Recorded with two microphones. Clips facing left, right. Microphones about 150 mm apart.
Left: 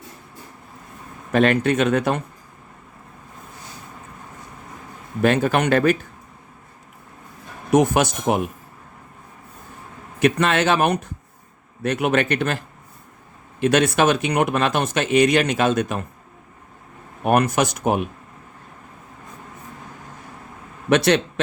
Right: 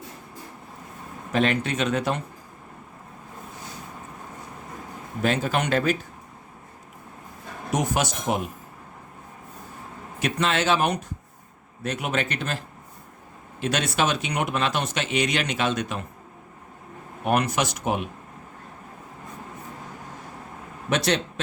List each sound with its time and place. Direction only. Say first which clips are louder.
1.3 s speech: left 6 dB; 55° left (ahead or behind)
5.2 s speech: left 6 dB; 60° left (ahead or behind)
7.7 s speech: left 8 dB; 60° left (ahead or behind)
10.2 s speech: left 6 dB; 60° left (ahead or behind)
13.6 s speech: left 7 dB; 55° left (ahead or behind)
17.2 s speech: left 5 dB; 50° left (ahead or behind)
20.9 s speech: left 7 dB; 65° left (ahead or behind)